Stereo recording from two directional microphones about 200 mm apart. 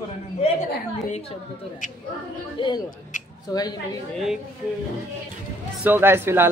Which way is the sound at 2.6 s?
25° left (ahead or behind).